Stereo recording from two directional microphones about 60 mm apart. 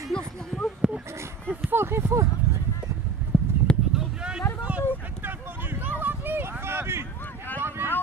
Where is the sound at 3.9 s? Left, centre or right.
Centre; by 7.1 s right.